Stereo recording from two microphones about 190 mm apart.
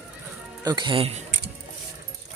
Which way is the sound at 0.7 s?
25° right (ahead or behind).